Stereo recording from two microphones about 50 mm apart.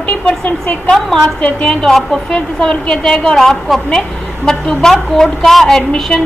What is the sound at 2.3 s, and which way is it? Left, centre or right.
A woman's voice, centre.